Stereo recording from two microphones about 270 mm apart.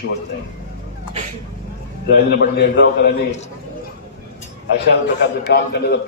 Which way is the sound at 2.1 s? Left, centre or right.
Left.